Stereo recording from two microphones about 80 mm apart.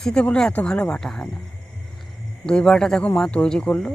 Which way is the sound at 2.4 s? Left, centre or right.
Centre.